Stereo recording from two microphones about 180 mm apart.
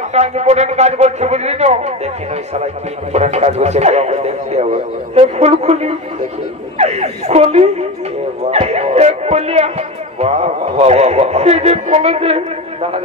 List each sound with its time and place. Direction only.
0.1 s speech: 35° right (ahead or behind)